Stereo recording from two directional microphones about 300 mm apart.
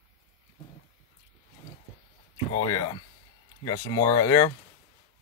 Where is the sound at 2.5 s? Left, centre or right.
Centre.